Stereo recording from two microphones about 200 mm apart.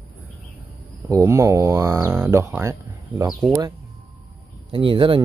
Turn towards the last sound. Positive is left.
turn(degrees=-25)  # may be behind; listen again after turning